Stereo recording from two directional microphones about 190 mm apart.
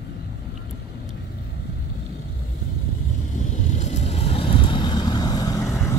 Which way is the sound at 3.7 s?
40° left (ahead or behind).